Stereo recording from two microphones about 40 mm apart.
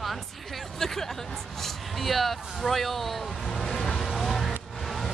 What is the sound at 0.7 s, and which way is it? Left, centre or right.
Hubbub, centre.